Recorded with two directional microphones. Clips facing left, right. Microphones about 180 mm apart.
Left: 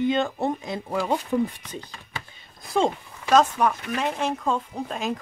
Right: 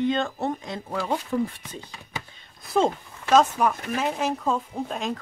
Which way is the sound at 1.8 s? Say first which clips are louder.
Even; 10° right (ahead or behind).